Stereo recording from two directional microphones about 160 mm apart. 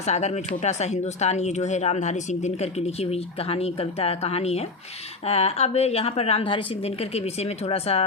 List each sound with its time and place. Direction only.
0.0 s a woman's voice: 45° left (ahead or behind)